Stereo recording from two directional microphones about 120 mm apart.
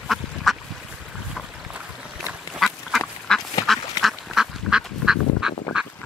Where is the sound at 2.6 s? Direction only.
Centre (ahead or behind).